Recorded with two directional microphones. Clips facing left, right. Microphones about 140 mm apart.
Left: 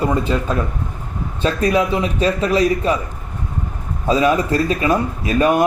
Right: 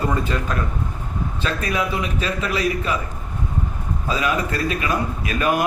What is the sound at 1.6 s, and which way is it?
Speech, 35° left (ahead or behind).